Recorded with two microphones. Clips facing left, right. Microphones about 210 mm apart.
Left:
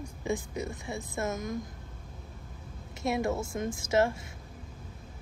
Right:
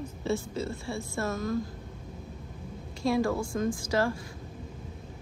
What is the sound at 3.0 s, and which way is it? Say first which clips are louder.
A woman's voice: right 3 dB; 20° left (ahead or behind).